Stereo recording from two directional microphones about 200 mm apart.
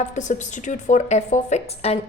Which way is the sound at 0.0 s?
35° left (ahead or behind).